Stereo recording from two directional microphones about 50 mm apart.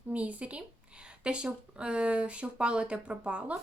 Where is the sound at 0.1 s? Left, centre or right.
Right.